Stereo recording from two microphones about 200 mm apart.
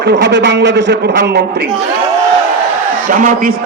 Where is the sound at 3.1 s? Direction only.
40° right (ahead or behind).